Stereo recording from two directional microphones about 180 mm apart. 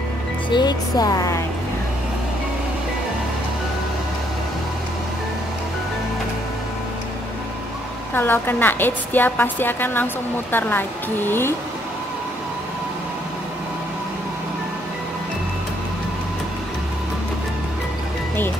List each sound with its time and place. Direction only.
0.5 s a woman's voice: 25° left (ahead or behind)
8.1 s a woman's voice: 10° left (ahead or behind)